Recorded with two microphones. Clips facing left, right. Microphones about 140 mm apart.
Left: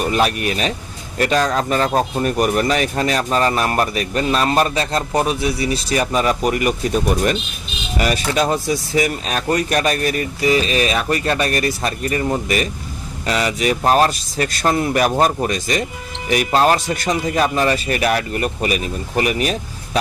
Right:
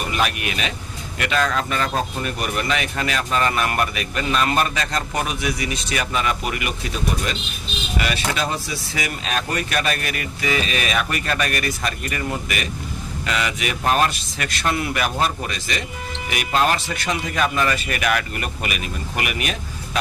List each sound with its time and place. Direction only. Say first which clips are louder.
0.0 s speech: left 6 dB; 40° left (ahead or behind)